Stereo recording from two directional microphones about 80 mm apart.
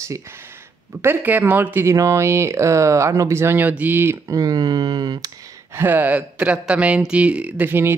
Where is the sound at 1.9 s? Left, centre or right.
Right.